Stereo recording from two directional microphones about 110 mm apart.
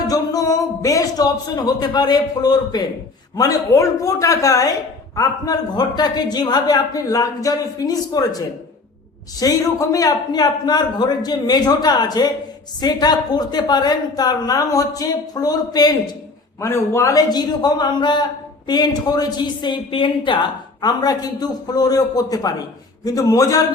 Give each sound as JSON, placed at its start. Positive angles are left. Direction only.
{"t": 0.1, "sound": "a woman's voice", "side_deg": 30}
{"t": 16.6, "sound": "a woman's voice", "side_deg": 25}